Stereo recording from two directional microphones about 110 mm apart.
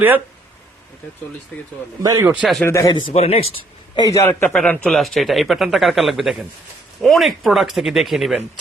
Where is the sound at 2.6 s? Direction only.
25° left (ahead or behind).